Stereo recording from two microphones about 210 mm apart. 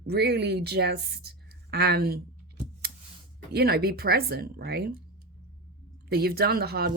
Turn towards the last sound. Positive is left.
turn(degrees=-50)  # may be behind; listen again after turning